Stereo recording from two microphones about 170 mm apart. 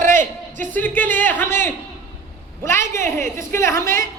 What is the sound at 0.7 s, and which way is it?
A woman's voice, 10° left (ahead or behind).